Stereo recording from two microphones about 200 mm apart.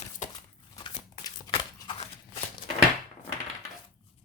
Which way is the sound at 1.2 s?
20° left (ahead or behind).